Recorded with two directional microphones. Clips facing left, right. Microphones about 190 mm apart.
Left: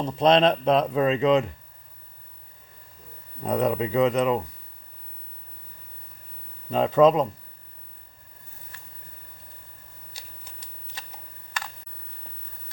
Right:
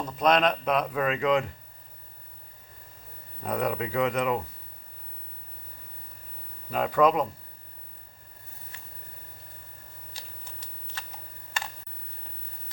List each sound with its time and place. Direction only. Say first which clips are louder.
0.0 s speech: left 4 dB; 25° left (ahead or behind)
3.4 s speech: left 5 dB; 25° left (ahead or behind)
6.7 s speech: left 5 dB; 25° left (ahead or behind)
11.6 s computer keyboard: even; 25° right (ahead or behind)